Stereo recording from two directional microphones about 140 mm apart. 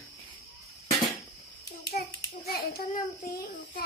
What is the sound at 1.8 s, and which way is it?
Hands, 90° left.